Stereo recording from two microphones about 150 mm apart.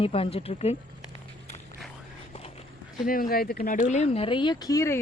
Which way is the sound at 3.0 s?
70° left (ahead or behind).